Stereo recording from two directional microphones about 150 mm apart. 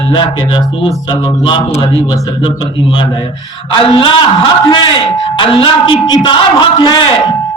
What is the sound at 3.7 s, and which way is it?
Speech, 35° left (ahead or behind).